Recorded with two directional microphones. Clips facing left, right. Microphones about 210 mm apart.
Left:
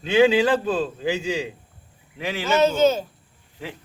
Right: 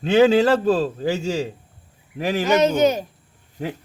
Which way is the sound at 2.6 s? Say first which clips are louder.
Left 2 dB; 15° right (ahead or behind).